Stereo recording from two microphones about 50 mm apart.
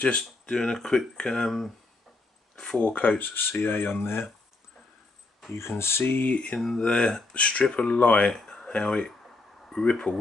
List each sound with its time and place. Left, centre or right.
0.5 s speech: centre
2.8 s speech: left
5.5 s speech: left
6.3 s speech: left
8.3 s a sound: centre
8.7 s speech: centre